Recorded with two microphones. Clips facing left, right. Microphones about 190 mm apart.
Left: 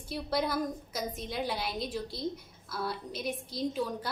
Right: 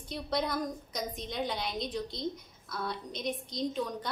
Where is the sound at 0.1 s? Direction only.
5° left (ahead or behind).